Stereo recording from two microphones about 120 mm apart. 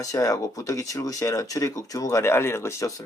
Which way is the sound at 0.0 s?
30° left (ahead or behind).